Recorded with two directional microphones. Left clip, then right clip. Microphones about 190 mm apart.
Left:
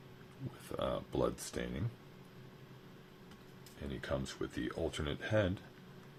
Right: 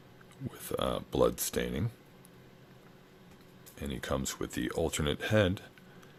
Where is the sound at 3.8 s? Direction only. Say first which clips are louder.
Right 5 dB; 65° right (ahead or behind).